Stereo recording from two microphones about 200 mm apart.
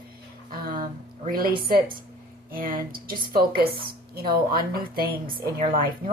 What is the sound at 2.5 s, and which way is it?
A woman's voice, 45° right (ahead or behind).